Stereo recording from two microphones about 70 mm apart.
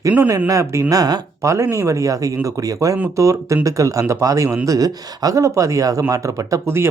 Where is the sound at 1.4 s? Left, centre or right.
Right.